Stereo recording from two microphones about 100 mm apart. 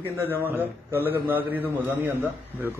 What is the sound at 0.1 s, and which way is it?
A man's voice, 20° right (ahead or behind).